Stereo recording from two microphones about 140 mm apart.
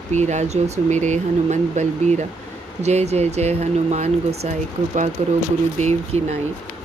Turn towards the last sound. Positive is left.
turn(degrees=-55)  # may be behind; listen again after turning